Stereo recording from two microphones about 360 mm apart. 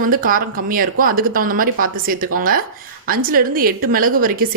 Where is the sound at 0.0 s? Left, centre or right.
Right.